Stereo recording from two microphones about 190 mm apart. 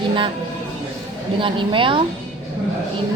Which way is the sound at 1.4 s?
25° right (ahead or behind).